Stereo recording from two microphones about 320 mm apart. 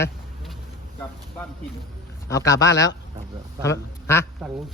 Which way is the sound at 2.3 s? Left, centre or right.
Centre.